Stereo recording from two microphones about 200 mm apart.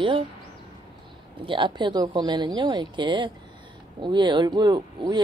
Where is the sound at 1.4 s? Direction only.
25° right (ahead or behind).